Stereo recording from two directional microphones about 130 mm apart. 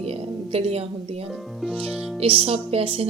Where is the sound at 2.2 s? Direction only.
45° right (ahead or behind).